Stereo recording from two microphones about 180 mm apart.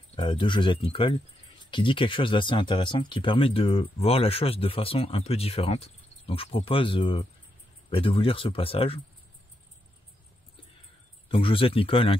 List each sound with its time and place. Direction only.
0.1 s speech: 30° left (ahead or behind)
11.2 s speech: 30° left (ahead or behind)